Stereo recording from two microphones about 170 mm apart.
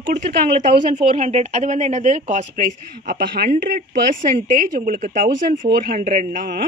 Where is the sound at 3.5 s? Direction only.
50° right (ahead or behind).